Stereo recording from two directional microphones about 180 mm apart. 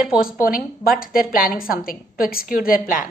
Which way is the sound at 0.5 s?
55° left (ahead or behind).